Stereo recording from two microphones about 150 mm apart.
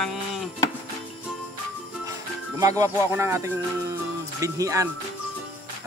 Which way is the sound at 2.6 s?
20° right (ahead or behind).